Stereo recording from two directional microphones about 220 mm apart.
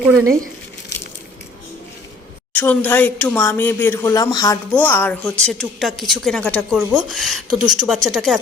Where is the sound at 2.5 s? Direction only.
10° left (ahead or behind).